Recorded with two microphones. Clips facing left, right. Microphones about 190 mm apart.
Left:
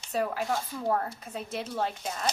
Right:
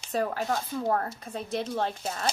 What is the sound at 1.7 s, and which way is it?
Speech, 30° right (ahead or behind).